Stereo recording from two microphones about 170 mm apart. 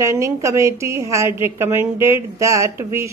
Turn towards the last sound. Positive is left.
turn(degrees=-15)  # may be behind; listen again after turning